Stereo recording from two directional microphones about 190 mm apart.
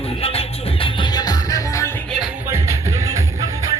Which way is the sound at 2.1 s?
5° right (ahead or behind).